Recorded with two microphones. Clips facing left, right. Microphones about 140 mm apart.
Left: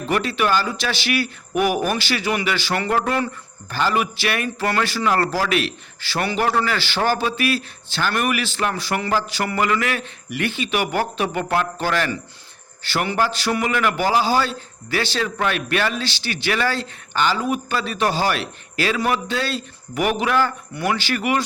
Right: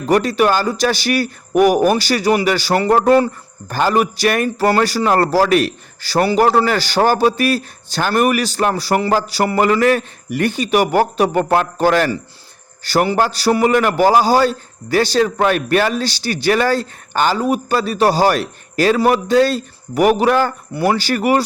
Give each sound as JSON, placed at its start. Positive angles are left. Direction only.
{"t": 0.1, "sound": "a man's voice", "side_deg": -40}